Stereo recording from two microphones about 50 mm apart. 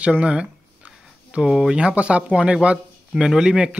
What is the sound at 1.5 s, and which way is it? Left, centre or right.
Speech, centre.